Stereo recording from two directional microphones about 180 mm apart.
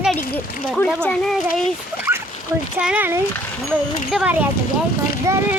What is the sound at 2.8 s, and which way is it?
Speech, 10° right (ahead or behind).